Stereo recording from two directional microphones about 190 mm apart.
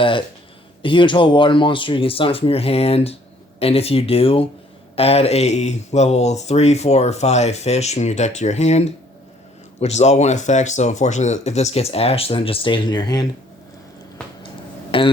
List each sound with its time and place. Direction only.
0.0 s speech: 25° left (ahead or behind)
14.9 s speech: 30° left (ahead or behind)